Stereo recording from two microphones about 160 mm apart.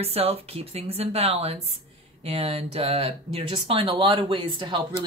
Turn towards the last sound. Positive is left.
turn(degrees=-30)  # may be behind; listen again after turning